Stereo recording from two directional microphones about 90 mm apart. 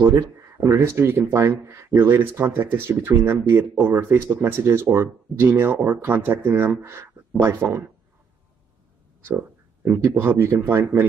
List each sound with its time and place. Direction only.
0.0 s speech: 30° right (ahead or behind)
9.9 s speech: 30° right (ahead or behind)